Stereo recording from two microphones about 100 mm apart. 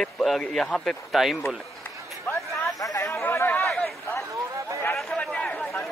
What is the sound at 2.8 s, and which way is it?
Chatter, 30° left (ahead or behind).